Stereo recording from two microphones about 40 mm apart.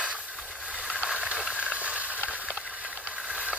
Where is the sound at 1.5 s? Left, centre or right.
Right.